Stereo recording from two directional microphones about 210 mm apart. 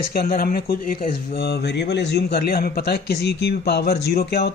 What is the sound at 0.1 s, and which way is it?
Speech, 45° left (ahead or behind).